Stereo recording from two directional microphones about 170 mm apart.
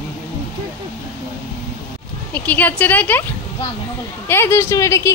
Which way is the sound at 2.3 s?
10° left (ahead or behind).